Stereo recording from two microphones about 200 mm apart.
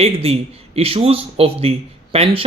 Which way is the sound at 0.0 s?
30° right (ahead or behind).